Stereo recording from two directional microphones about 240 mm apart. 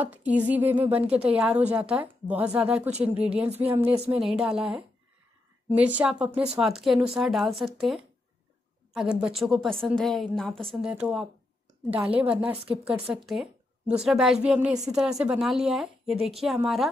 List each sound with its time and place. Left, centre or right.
0.0 s a woman's voice: centre
3.4 s speech: right
4.1 s a woman's voice: centre
5.7 s a woman's voice: centre
12.3 s a woman's voice: centre